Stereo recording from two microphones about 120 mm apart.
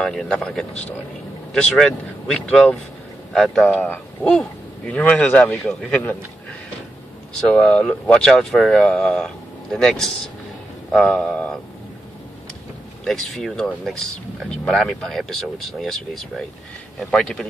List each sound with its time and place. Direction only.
0.0 s a man's voice: 5° left (ahead or behind)
7.3 s speech: 5° left (ahead or behind)
13.0 s speech: centre (ahead or behind)